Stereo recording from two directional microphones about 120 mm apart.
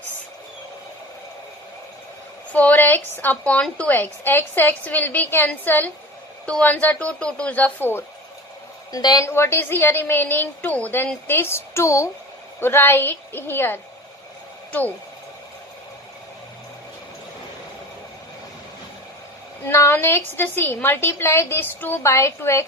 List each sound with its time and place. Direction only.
2.5 s a woman's voice: 10° left (ahead or behind)
8.9 s a woman's voice: 35° left (ahead or behind)
9.2 s a woman's voice: 20° left (ahead or behind)
19.6 s a woman's voice: 20° left (ahead or behind)